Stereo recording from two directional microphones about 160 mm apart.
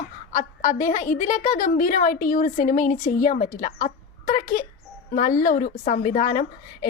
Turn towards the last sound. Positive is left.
turn(degrees=55)  # may be behind; listen again after turning